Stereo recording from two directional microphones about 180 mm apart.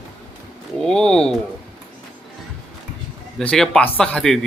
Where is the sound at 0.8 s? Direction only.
5° left (ahead or behind).